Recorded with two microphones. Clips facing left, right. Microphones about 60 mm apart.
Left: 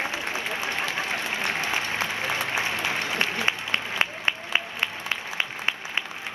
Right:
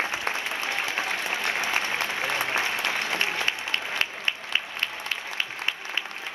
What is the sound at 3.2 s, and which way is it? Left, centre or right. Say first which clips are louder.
Applause: left 1 dB; left.